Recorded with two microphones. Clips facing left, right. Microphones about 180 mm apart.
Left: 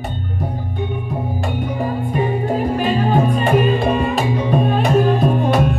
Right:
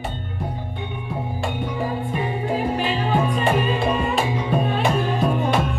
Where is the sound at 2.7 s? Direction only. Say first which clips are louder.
Left 5 dB; 45° left (ahead or behind).